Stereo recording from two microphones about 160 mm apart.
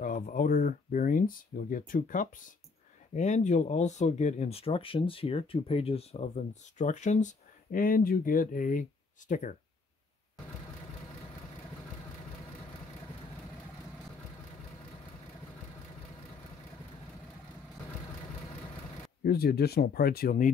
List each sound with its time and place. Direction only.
0.0 s speech: 60° left (ahead or behind)
7.7 s speech: 60° left (ahead or behind)
19.2 s speech: 80° left; by 20.5 s 60° left (ahead or behind)